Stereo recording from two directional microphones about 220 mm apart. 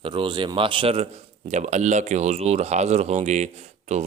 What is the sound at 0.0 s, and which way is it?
Speech, 20° right (ahead or behind).